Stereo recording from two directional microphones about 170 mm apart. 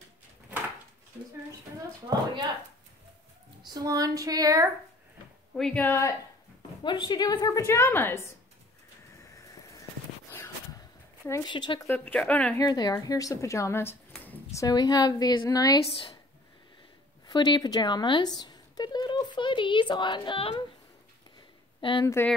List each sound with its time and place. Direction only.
3.6 s a woman's voice: 20° right (ahead or behind)
5.6 s speech: 5° left (ahead or behind)
6.8 s a woman's voice: 25° left (ahead or behind)
11.2 s a woman's voice: 25° left (ahead or behind)
11.9 s speech: 10° left (ahead or behind)
12.5 s a woman's voice: 20° left (ahead or behind)
17.3 s speech: 25° left (ahead or behind)
22.0 s speech: 15° left (ahead or behind)